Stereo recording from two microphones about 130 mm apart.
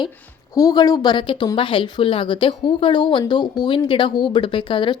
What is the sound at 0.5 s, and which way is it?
Speech, 30° left (ahead or behind).